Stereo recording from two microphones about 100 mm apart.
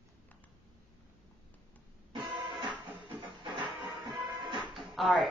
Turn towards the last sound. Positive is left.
turn(degrees=0)  # may be behind; listen again after turning